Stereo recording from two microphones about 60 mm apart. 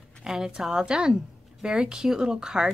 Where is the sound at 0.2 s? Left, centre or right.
Centre.